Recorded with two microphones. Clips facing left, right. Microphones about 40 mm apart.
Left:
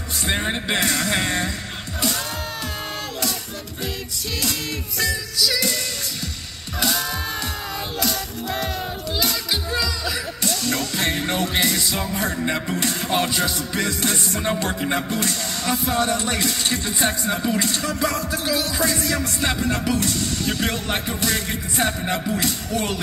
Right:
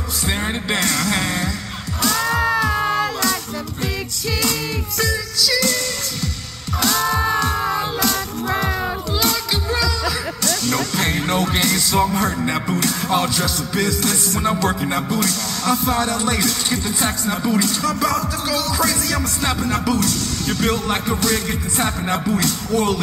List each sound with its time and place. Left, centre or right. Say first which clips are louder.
0.5 s speech: right 1 dB; centre
1.0 s music: right 1 dB; centre
4.9 s music: right 2 dB; centre
6.8 s music: right 4 dB; centre
9.2 s music: right 2 dB; centre
12.7 s music: right 4 dB; centre
14.7 s speech: right 2 dB; centre
15.1 s music: right 3 dB; centre
15.7 s speech: right 2 dB; centre